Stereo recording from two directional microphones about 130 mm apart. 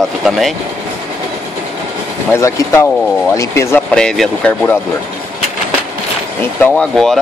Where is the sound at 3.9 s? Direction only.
5° left (ahead or behind).